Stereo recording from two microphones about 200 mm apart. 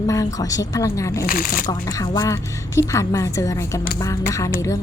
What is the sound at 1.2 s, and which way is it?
Speech, 45° left (ahead or behind).